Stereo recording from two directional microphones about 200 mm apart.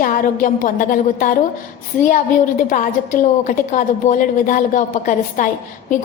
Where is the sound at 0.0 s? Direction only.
45° left (ahead or behind).